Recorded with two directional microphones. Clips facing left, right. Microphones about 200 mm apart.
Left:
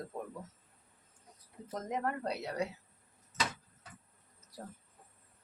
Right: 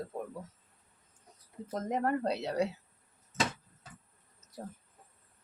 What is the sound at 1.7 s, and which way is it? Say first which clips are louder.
A woman's voice: right 5 dB; 30° right (ahead or behind).